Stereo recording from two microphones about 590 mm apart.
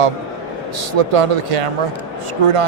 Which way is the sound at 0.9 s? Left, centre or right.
Right.